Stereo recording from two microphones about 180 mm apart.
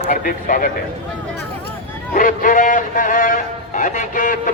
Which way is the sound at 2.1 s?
50° left (ahead or behind).